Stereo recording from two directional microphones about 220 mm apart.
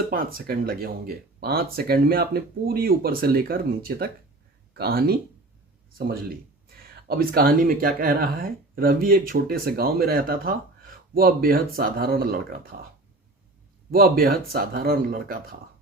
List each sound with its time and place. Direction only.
0.1 s speech: 40° right (ahead or behind)
13.9 s speech: 40° right (ahead or behind)